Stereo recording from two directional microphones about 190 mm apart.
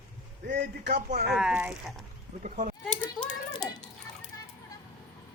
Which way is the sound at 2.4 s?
45° right (ahead or behind).